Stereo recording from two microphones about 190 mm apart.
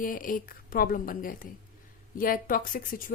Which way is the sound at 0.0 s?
45° left (ahead or behind).